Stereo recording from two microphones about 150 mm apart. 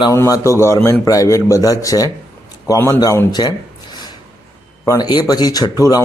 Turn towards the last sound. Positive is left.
turn(degrees=25)  # may be behind; listen again after turning